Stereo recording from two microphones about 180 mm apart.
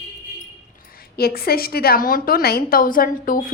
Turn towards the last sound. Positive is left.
turn(degrees=50)  # may be behind; listen again after turning